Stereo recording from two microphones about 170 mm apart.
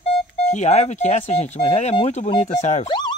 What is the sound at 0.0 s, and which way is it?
Speech, 40° left (ahead or behind).